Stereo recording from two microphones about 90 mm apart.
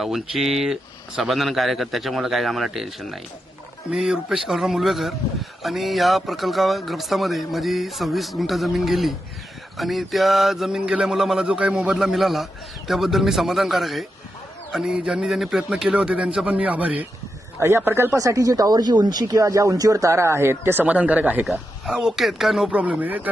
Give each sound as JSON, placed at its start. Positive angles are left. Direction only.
{"t": 0.0, "sound": "a man's voice", "side_deg": -5}
{"t": 17.6, "sound": "speech", "side_deg": -30}
{"t": 21.8, "sound": "speech", "side_deg": -5}
{"t": 22.7, "sound": "a man's voice", "side_deg": -15}